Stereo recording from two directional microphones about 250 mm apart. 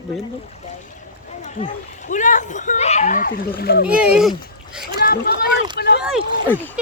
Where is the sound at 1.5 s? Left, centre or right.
Left.